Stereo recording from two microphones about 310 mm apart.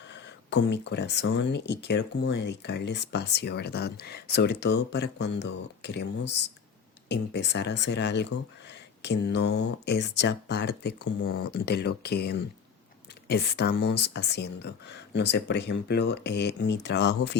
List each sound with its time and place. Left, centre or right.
0.1 s speech: left